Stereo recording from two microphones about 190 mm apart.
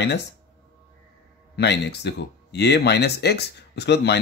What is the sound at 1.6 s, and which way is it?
Speech, 65° left (ahead or behind).